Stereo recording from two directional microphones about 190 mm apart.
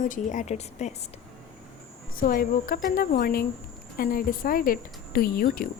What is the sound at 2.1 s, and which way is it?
A woman's voice, 50° left (ahead or behind).